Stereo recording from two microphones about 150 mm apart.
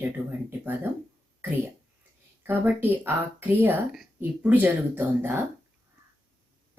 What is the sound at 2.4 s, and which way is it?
A woman's voice, 15° right (ahead or behind).